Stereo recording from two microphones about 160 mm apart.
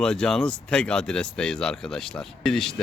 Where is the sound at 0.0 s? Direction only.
5° left (ahead or behind).